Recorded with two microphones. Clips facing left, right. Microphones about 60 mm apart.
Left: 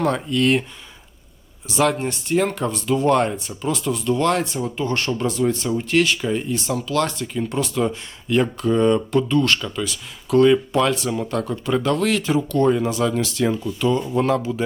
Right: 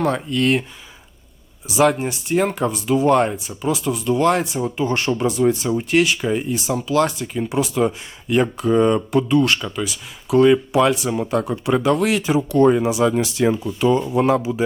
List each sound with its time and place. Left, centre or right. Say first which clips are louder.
0.0 s speech: even; centre
1.6 s speech: right 3 dB; centre